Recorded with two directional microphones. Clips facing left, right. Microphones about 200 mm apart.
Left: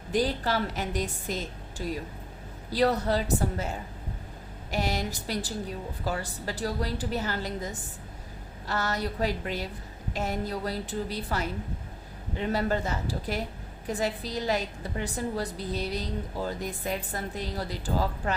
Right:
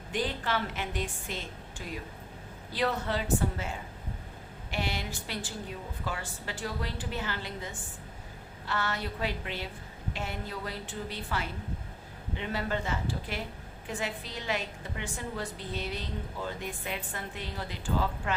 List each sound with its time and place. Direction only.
0.1 s a woman's voice: 40° left (ahead or behind)